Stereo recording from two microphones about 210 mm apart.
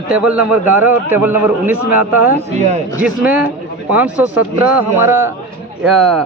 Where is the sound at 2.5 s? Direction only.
30° right (ahead or behind).